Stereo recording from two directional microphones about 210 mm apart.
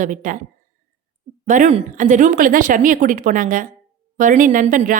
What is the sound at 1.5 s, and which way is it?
A woman's voice, 35° right (ahead or behind).